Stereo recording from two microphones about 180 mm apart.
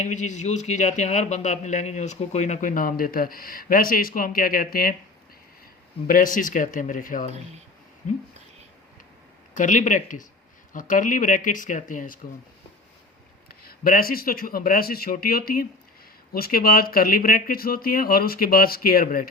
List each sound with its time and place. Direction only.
0.0 s a man's voice: 40° left (ahead or behind)
6.1 s a man's voice: 50° left (ahead or behind)
9.6 s a man's voice: 45° left (ahead or behind)
13.6 s speech: 55° left (ahead or behind)